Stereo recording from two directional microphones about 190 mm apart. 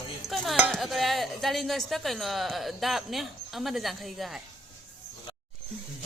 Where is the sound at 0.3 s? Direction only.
Centre (ahead or behind).